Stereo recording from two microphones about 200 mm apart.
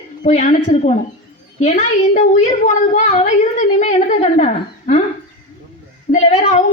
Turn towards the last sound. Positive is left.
turn(degrees=35)  # may be behind; listen again after turning